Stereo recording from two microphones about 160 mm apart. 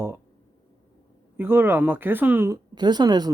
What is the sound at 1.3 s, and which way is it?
Speech, 15° right (ahead or behind).